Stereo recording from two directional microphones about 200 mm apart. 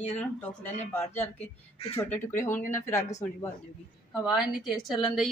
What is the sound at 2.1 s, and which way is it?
Speech, 10° left (ahead or behind).